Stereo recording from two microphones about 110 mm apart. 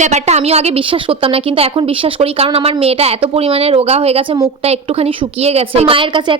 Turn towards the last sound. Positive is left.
turn(degrees=-50)  # may be behind; listen again after turning